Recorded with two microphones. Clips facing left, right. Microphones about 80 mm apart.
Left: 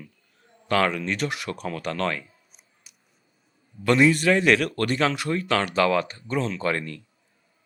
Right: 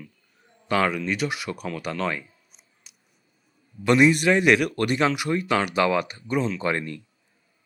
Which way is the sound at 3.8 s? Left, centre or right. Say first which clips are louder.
Right 1 dB; centre.